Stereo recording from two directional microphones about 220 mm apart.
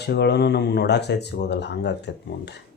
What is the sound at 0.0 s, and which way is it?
Speech, 50° left (ahead or behind).